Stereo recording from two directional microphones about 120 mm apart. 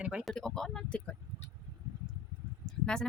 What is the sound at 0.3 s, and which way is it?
Speech, 5° left (ahead or behind).